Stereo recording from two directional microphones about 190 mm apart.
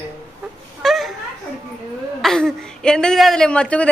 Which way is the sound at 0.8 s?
Centre (ahead or behind).